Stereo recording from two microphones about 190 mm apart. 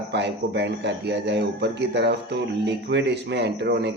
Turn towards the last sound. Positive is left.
turn(degrees=-60)  # may be behind; listen again after turning